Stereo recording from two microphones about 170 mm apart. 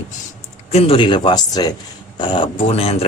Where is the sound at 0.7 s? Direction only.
30° left (ahead or behind).